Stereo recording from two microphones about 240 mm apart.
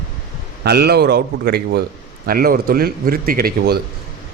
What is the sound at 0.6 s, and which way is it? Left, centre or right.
A man's voice, right.